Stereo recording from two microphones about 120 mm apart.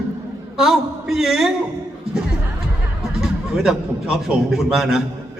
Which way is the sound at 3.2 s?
5° right (ahead or behind).